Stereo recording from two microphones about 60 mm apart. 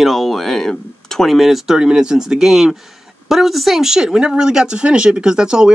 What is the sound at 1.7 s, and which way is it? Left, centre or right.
Speech, centre.